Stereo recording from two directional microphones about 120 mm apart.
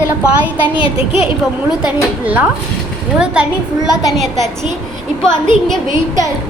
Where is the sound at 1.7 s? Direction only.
10° right (ahead or behind).